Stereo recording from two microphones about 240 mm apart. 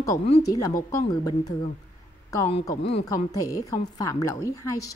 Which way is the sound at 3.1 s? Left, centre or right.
Centre.